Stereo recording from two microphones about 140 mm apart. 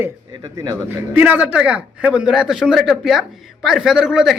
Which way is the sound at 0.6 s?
25° right (ahead or behind).